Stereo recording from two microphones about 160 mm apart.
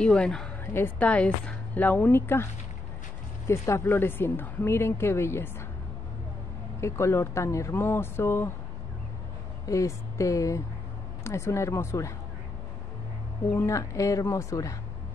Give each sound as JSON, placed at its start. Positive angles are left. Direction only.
{"t": 0.0, "sound": "a woman's voice", "side_deg": 5}
{"t": 3.4, "sound": "a woman's voice", "side_deg": 15}
{"t": 6.8, "sound": "a woman's voice", "side_deg": 15}
{"t": 9.7, "sound": "a woman's voice", "side_deg": 20}
{"t": 13.6, "sound": "a woman's voice", "side_deg": 20}